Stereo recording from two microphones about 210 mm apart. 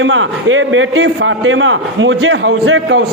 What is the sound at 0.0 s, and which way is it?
A man's voice, 65° right (ahead or behind).